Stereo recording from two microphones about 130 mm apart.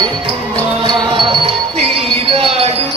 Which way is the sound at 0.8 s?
35° right (ahead or behind).